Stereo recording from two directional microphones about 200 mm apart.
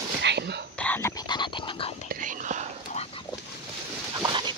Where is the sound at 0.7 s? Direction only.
10° left (ahead or behind).